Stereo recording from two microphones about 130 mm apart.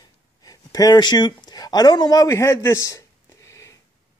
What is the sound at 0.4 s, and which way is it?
Speech, 30° left (ahead or behind).